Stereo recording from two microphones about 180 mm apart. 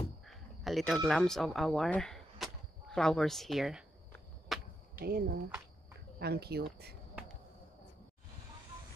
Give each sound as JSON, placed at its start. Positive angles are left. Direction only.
{"t": 0.2, "sound": "speech", "side_deg": 0}
{"t": 4.5, "sound": "a sound", "side_deg": 0}
{"t": 4.9, "sound": "speech", "side_deg": -55}